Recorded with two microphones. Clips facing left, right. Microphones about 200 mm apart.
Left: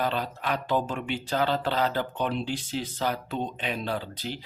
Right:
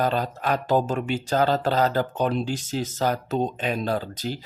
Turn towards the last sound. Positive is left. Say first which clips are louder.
# right 5 dB
turn(degrees=-40)  # may be behind; listen again after turning